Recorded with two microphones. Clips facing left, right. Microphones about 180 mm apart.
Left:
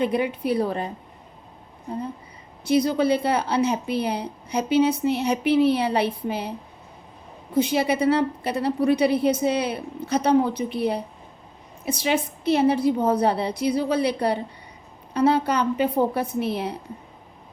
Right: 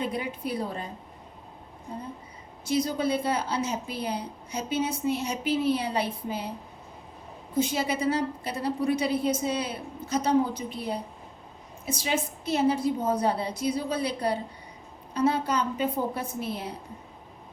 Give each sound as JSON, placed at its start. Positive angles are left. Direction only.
{"t": 0.0, "sound": "a woman's voice", "side_deg": 70}
{"t": 2.6, "sound": "a woman's voice", "side_deg": 65}
{"t": 7.5, "sound": "a woman's voice", "side_deg": 65}